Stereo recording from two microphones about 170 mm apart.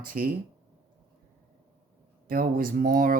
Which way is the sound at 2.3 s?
55° right (ahead or behind).